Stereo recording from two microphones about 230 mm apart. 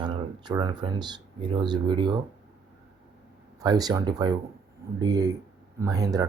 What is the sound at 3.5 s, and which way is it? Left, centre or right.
Speech, centre.